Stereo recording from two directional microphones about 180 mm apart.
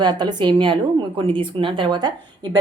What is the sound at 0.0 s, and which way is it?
Speech, 25° right (ahead or behind).